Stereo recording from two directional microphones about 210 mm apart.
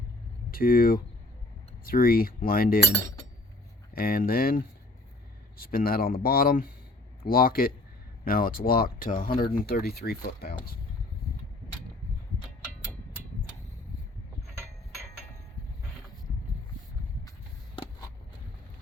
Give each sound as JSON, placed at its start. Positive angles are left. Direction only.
{"t": 0.5, "sound": "speech", "side_deg": 45}
{"t": 3.9, "sound": "speech", "side_deg": 45}